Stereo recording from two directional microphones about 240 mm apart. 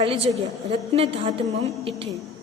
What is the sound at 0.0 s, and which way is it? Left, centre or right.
A woman's voice, right.